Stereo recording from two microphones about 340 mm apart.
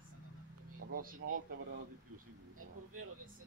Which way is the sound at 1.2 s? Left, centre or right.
Right.